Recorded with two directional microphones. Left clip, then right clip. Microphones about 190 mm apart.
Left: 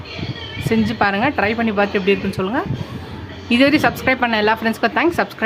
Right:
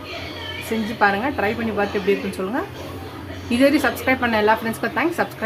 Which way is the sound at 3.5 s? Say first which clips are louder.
Left 3 dB; 30° left (ahead or behind).